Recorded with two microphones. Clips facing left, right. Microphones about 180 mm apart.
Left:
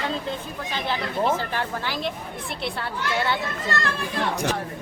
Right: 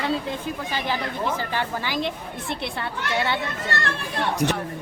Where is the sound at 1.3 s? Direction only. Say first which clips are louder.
Right 1 dB; 15° right (ahead or behind).